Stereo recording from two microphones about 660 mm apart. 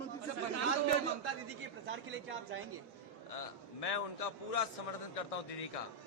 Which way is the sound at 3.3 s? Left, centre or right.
Left.